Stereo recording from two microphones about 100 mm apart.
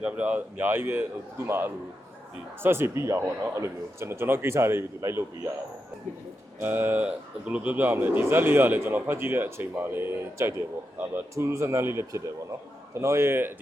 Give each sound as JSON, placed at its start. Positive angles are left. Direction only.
{"t": 0.0, "sound": "speech", "side_deg": -15}
{"t": 6.6, "sound": "speech", "side_deg": -20}